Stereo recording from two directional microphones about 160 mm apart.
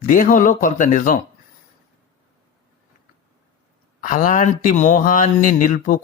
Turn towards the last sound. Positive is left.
turn(degrees=55)  # may be behind; listen again after turning